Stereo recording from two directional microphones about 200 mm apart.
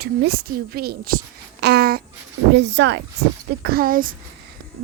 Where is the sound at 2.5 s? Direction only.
60° right (ahead or behind).